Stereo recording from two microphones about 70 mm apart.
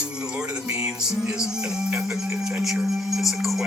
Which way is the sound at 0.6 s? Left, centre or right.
Right.